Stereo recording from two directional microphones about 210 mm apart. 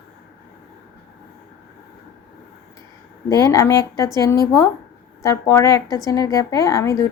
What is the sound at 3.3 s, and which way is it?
Speech, 15° left (ahead or behind).